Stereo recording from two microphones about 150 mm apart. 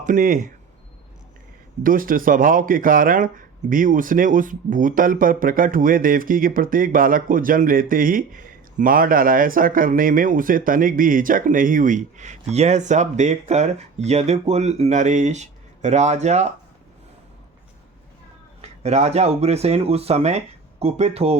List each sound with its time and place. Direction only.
0.0 s speech: 60° right (ahead or behind)
1.8 s speech: 70° right (ahead or behind); by 16.5 s 50° right (ahead or behind)
18.6 s speech: 50° right (ahead or behind)